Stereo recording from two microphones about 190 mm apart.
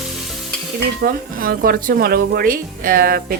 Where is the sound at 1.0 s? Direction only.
50° right (ahead or behind).